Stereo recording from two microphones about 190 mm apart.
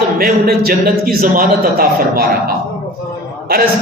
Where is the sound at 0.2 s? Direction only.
50° right (ahead or behind).